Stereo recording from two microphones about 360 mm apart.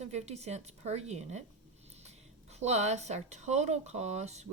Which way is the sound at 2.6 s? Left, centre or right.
Centre.